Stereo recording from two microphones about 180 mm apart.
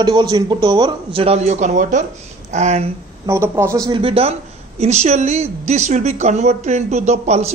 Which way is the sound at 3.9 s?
30° right (ahead or behind).